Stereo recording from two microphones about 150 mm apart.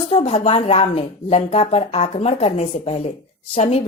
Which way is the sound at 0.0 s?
45° left (ahead or behind).